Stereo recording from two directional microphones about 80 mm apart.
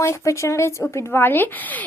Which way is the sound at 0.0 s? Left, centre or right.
Left.